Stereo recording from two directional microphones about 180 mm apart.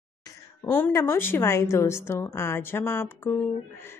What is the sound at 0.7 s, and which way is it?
A woman's voice, 10° left (ahead or behind).